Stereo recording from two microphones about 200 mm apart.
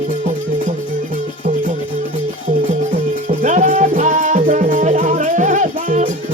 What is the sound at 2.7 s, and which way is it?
Music, 40° right (ahead or behind).